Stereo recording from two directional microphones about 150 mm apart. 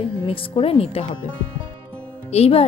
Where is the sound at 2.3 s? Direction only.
40° left (ahead or behind).